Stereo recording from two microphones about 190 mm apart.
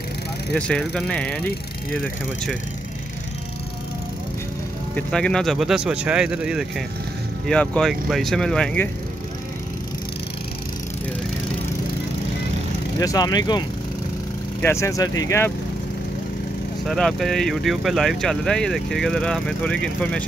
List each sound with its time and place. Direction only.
0.5 s speech: 5° left (ahead or behind)
4.9 s speech: 5° left (ahead or behind)
7.4 s speech: 5° left (ahead or behind)
13.0 s speech: 20° left (ahead or behind)
16.8 s speech: centre (ahead or behind)